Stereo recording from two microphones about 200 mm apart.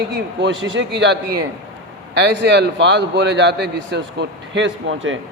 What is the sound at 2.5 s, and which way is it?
A man's voice, 60° right (ahead or behind).